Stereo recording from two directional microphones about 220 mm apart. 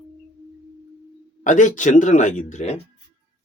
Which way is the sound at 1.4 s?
35° left (ahead or behind).